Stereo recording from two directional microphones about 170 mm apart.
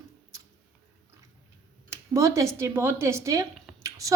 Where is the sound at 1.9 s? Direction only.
15° right (ahead or behind).